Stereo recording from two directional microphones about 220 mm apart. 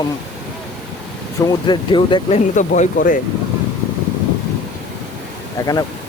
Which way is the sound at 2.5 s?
35° left (ahead or behind).